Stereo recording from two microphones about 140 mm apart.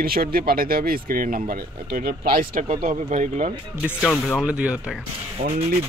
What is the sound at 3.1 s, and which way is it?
Speech, 60° right (ahead or behind).